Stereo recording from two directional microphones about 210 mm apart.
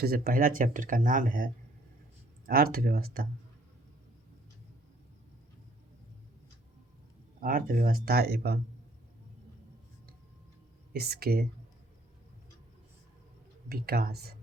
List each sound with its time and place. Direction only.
0.0 s speech: 45° right (ahead or behind)
2.5 s speech: 45° right (ahead or behind)
7.4 s speech: 40° right (ahead or behind)
10.9 s speech: 50° right (ahead or behind)
13.7 s speech: 45° right (ahead or behind)